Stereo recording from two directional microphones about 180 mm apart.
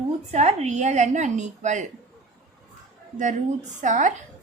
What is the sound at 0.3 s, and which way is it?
A woman's voice, 40° right (ahead or behind).